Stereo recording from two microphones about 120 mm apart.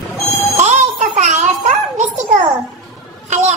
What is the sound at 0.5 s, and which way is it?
Music, 70° right (ahead or behind).